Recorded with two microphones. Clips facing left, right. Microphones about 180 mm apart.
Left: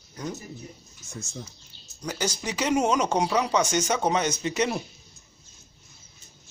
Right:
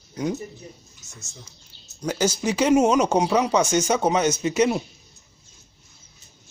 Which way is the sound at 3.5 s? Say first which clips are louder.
Right 3 dB; 25° right (ahead or behind).